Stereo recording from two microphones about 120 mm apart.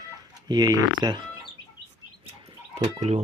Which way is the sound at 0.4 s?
35° right (ahead or behind).